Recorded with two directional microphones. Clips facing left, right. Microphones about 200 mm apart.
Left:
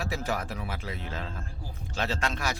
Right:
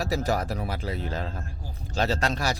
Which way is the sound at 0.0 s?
40° right (ahead or behind).